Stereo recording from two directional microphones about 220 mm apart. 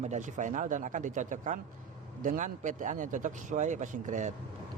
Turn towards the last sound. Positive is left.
turn(degrees=-35)  # may be behind; listen again after turning